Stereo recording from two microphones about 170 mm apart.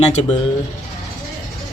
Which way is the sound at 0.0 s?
40° left (ahead or behind).